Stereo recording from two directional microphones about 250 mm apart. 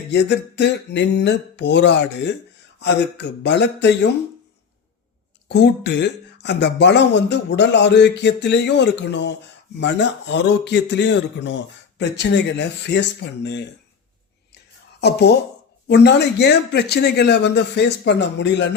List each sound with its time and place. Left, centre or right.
0.1 s speech: left
5.5 s speech: left
15.0 s speech: left